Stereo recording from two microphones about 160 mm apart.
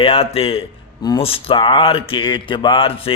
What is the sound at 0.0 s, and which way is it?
Speech, 35° left (ahead or behind).